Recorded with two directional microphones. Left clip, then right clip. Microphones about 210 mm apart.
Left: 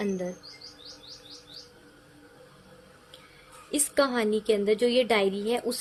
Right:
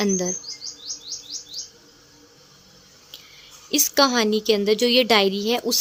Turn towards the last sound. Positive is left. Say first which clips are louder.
# right 6 dB
turn(degrees=-25)  # may be behind; listen again after turning